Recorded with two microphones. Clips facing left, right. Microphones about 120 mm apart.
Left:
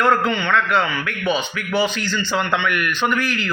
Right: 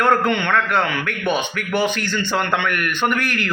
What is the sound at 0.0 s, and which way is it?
A man's voice, 50° right (ahead or behind).